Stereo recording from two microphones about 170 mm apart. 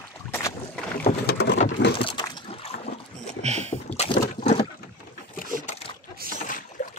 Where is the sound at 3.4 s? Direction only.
40° right (ahead or behind).